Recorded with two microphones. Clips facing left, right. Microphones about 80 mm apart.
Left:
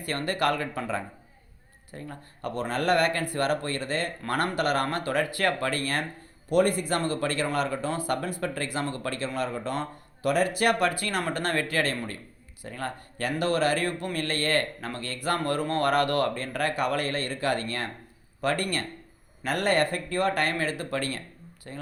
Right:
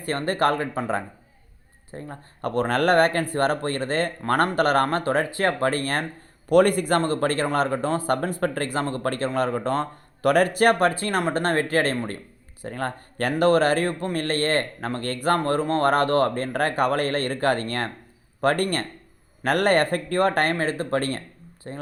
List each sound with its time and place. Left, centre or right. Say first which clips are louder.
0.0 s a man's voice: right 4 dB; right
2.4 s a man's voice: right 7 dB; right
6.5 s a man's voice: right 6 dB; right
11.2 s speech: right 7 dB; right
11.4 s a man's voice: right 5 dB; right
15.4 s a man's voice: right 5 dB; right